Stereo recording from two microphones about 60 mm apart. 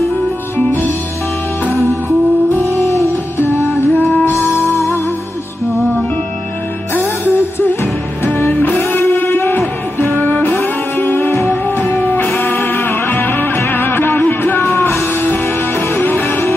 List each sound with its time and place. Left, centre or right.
2.6 s music: left
3.3 s music: left
6.9 s music: left
14.6 s music: left